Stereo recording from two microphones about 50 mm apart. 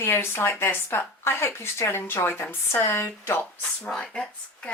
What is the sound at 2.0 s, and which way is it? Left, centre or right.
Speech, left.